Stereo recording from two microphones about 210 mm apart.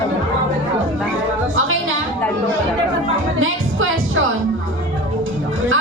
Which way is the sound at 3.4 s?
70° right (ahead or behind).